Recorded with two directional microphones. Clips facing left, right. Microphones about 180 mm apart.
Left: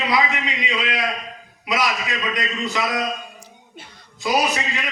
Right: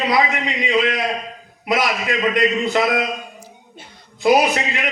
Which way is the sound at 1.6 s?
55° right (ahead or behind).